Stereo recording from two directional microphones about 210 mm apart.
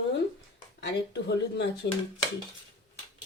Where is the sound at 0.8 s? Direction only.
55° left (ahead or behind).